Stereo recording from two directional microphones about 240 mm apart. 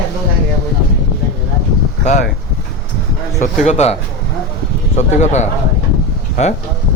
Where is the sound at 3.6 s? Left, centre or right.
Left.